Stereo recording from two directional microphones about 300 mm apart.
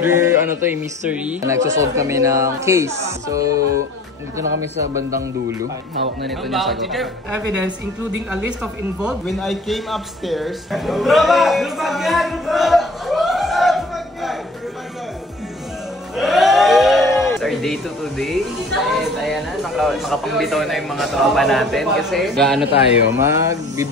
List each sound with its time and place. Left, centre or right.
0.0 s speech: centre
16.2 s a sound: centre
17.0 s music: centre
18.9 s speech: centre
23.2 s speech: centre